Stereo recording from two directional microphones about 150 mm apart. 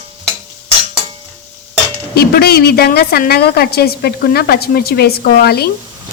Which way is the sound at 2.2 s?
90° left.